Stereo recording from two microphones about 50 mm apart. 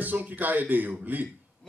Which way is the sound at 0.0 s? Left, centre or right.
Right.